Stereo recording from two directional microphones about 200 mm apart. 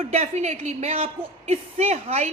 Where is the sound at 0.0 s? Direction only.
30° right (ahead or behind).